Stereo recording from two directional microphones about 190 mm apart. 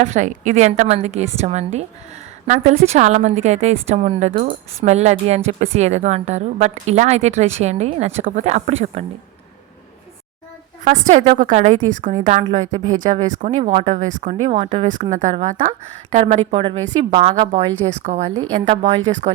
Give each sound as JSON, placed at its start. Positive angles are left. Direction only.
{"t": 0.0, "sound": "a woman's voice", "side_deg": -40}
{"t": 10.8, "sound": "a woman's voice", "side_deg": -40}